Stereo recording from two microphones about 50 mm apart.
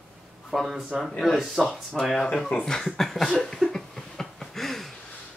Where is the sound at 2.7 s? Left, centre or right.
Centre.